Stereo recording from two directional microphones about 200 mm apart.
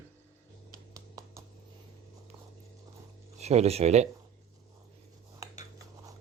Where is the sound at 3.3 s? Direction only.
30° right (ahead or behind).